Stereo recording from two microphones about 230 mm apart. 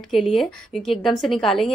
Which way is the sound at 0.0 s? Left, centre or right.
Centre.